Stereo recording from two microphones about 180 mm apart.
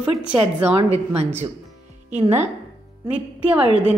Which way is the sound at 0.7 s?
35° right (ahead or behind).